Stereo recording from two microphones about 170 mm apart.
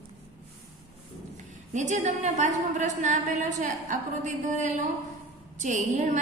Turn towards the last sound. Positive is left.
turn(degrees=-45)  # may be behind; listen again after turning